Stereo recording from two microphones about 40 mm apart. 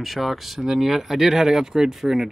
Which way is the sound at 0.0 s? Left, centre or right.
Centre.